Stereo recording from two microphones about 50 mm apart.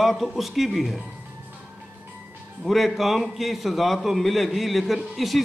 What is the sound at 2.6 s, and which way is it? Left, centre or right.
A man's voice, centre.